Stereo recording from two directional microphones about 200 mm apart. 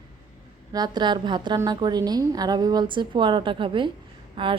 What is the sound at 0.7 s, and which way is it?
A woman's voice, 20° right (ahead or behind).